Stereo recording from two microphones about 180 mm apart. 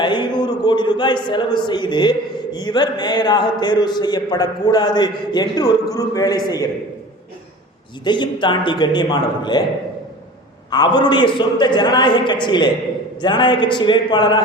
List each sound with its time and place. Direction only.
0.0 s a man's voice: 25° left (ahead or behind)
8.0 s a man's voice: 25° left (ahead or behind)
10.7 s a man's voice: 25° left (ahead or behind)